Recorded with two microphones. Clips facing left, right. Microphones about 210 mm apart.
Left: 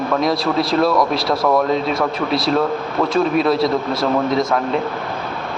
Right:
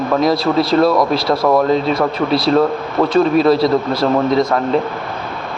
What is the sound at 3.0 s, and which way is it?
Speech, 15° right (ahead or behind).